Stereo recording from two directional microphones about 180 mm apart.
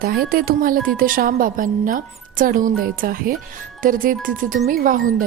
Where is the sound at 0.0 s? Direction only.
55° right (ahead or behind).